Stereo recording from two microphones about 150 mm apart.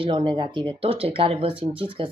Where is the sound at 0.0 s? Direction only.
35° right (ahead or behind).